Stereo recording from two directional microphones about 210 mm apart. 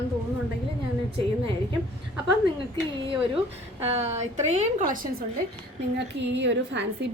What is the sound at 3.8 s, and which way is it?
A woman's voice, 30° right (ahead or behind).